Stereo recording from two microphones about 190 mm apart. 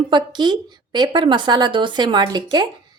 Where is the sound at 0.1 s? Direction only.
25° right (ahead or behind).